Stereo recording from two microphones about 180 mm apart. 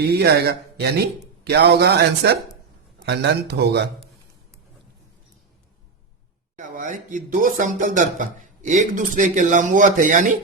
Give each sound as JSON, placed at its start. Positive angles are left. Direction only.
{"t": 0.0, "sound": "speech", "side_deg": -65}
{"t": 6.7, "sound": "speech", "side_deg": -45}